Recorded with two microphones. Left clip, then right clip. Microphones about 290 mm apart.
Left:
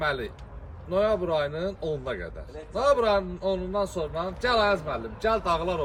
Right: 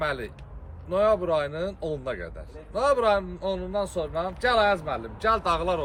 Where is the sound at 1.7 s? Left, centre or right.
Centre.